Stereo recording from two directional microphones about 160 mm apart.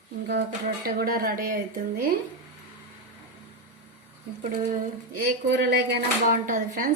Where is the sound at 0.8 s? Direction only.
70° right (ahead or behind).